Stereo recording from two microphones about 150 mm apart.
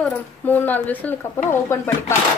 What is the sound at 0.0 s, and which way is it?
Speech, 10° left (ahead or behind).